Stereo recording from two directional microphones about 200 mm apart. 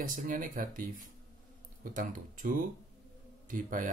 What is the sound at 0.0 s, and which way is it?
Speech, 40° right (ahead or behind).